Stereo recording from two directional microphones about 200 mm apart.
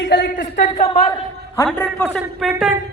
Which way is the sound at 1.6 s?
5° left (ahead or behind).